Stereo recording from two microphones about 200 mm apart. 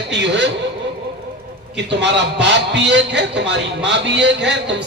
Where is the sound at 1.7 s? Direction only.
60° right (ahead or behind).